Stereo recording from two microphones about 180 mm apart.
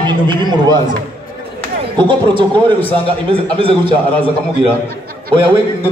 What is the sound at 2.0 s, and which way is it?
A man's voice, 25° right (ahead or behind).